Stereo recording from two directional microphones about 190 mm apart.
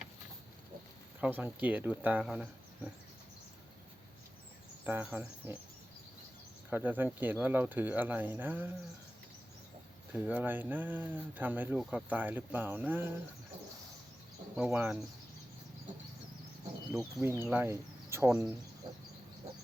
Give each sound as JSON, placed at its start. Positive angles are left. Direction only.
{"t": 1.2, "sound": "speech", "side_deg": -10}
{"t": 4.8, "sound": "speech", "side_deg": -10}
{"t": 6.7, "sound": "speech", "side_deg": -10}
{"t": 10.1, "sound": "speech", "side_deg": -10}
{"t": 14.5, "sound": "speech", "side_deg": -10}
{"t": 16.9, "sound": "speech", "side_deg": 0}